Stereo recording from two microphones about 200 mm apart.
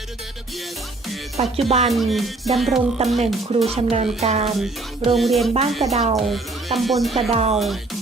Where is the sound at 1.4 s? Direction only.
30° right (ahead or behind).